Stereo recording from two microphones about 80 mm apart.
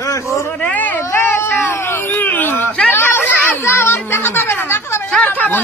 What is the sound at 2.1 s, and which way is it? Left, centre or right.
Speech, left.